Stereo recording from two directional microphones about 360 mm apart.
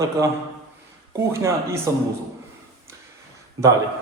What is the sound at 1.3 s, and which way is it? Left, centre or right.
Speech, centre.